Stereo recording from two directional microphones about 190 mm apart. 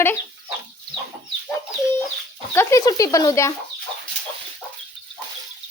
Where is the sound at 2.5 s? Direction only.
15° left (ahead or behind).